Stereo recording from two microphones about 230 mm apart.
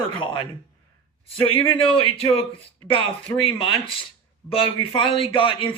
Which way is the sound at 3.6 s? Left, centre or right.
Left.